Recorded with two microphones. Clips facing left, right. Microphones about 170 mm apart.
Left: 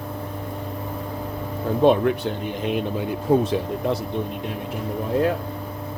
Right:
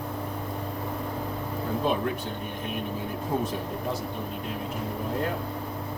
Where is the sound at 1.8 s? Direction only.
75° left (ahead or behind).